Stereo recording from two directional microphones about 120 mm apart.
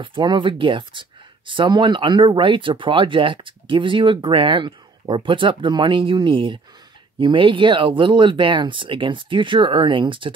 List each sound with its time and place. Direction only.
0.0 s speech: 45° right (ahead or behind)